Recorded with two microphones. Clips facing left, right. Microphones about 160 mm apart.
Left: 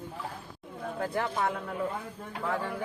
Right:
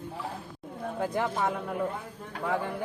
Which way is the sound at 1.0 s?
15° right (ahead or behind).